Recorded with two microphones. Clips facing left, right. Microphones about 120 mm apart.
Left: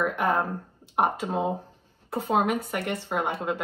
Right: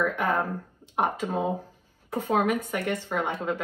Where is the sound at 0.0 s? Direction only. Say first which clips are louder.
Left 1 dB; 15° left (ahead or behind).